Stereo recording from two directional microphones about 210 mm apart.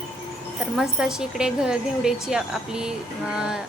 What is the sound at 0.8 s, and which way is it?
A woman's voice, 5° right (ahead or behind).